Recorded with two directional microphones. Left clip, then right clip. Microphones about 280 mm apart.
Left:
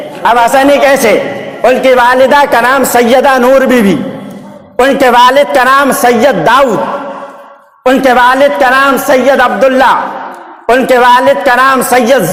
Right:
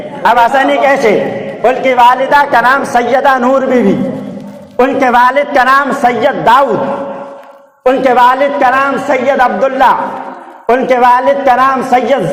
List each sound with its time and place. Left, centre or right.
0.2 s a woman's voice: left
7.9 s a woman's voice: left